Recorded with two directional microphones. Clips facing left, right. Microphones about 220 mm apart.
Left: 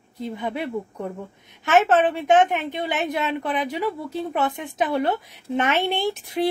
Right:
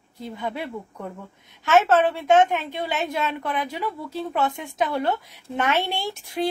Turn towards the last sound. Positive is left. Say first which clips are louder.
# left 3 dB
turn(degrees=20)  # may be behind; listen again after turning